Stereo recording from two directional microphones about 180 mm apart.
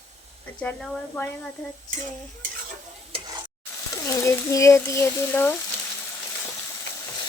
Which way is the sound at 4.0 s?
15° left (ahead or behind).